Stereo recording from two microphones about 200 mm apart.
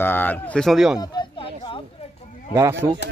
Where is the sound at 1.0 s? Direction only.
25° left (ahead or behind).